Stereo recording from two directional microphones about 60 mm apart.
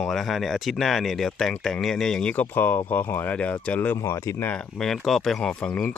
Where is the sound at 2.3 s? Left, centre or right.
Left.